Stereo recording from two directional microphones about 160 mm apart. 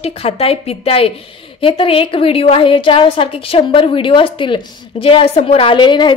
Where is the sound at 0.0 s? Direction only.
40° left (ahead or behind).